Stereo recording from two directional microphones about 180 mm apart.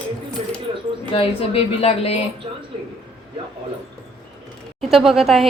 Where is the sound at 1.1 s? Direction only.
35° left (ahead or behind).